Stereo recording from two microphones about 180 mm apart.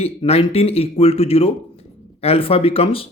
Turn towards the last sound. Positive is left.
turn(degrees=30)  # may be behind; listen again after turning